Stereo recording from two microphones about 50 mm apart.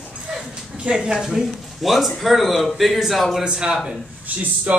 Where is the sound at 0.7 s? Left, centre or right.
Centre.